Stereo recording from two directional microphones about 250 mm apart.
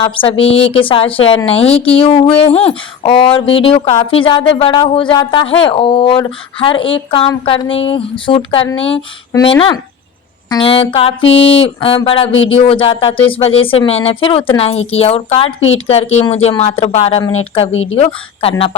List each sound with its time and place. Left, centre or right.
0.0 s speech: left